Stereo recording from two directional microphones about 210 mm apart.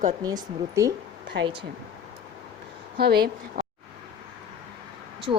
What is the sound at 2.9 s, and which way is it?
Speech, 50° right (ahead or behind).